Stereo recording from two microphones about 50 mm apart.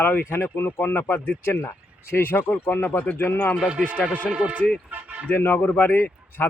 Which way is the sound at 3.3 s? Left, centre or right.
Left.